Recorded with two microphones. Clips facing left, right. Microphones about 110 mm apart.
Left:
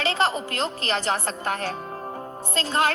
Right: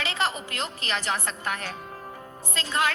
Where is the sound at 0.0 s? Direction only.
35° left (ahead or behind).